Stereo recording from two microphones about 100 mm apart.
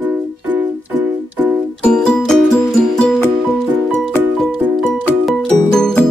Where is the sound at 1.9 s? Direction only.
10° left (ahead or behind).